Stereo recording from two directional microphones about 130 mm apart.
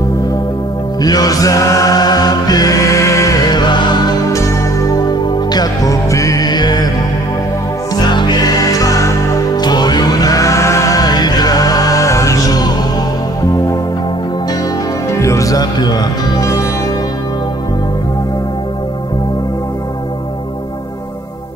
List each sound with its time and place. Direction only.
1.0 s music: 30° left (ahead or behind)
7.9 s music: 35° left (ahead or behind)
15.0 s music: 25° left (ahead or behind)